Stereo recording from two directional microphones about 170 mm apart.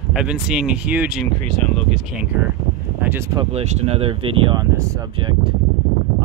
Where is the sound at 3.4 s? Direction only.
35° right (ahead or behind).